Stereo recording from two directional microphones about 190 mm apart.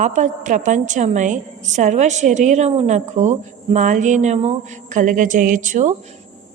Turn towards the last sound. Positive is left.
turn(degrees=-40)  # may be behind; listen again after turning